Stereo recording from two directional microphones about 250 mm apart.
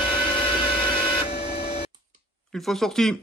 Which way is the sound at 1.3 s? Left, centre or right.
Left.